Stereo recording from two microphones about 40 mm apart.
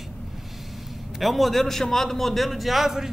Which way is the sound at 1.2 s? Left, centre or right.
Centre.